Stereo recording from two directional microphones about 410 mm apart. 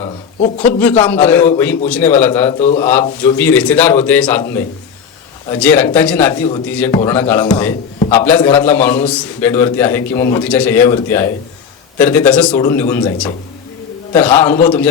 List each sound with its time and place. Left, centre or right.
0.8 s a man's voice: centre
2.6 s speech: centre
2.8 s a man's voice: centre